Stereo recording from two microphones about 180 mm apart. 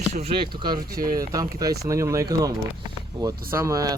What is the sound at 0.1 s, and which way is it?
Speech, 35° right (ahead or behind).